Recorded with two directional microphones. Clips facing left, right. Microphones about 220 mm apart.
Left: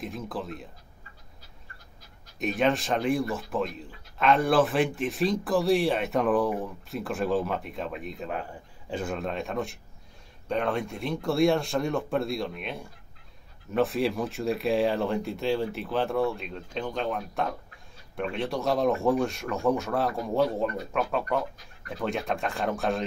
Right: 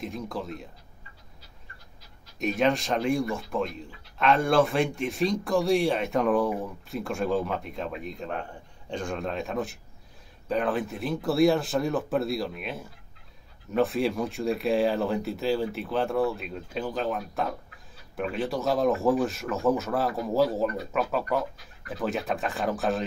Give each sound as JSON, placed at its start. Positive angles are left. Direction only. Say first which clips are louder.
{"t": 0.0, "sound": "speech", "louder": "right 1 dB", "side_deg": 0}
{"t": 2.3, "sound": "speech", "louder": "right 1 dB", "side_deg": 0}